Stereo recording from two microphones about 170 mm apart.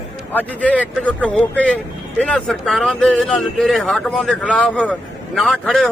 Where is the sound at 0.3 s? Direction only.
10° left (ahead or behind).